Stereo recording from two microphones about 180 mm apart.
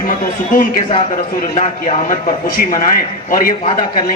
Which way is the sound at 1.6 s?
40° left (ahead or behind).